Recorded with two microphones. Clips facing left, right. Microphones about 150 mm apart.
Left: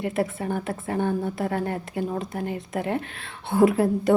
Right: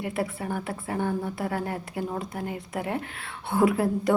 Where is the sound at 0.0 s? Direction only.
35° left (ahead or behind).